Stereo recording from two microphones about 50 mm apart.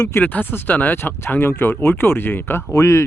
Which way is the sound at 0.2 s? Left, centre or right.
Left.